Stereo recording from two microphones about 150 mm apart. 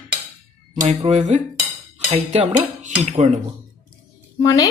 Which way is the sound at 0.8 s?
45° right (ahead or behind).